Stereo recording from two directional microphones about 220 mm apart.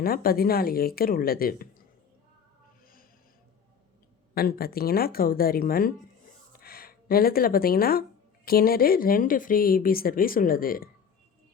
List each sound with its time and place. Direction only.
0.0 s speech: 40° left (ahead or behind)
4.4 s speech: 45° left (ahead or behind)